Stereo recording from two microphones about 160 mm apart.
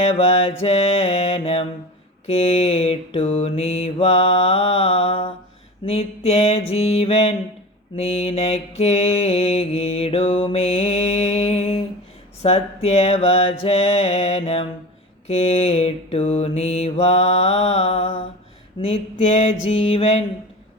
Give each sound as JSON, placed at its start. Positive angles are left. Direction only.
{"t": 0.0, "sound": "mantra", "side_deg": 40}